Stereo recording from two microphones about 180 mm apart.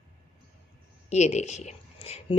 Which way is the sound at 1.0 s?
40° left (ahead or behind).